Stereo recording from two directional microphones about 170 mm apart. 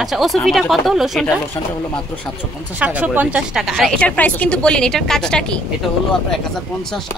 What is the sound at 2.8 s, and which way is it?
A woman's voice, 10° right (ahead or behind).